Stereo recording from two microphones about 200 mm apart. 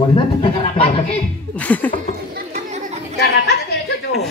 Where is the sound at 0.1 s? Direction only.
25° left (ahead or behind).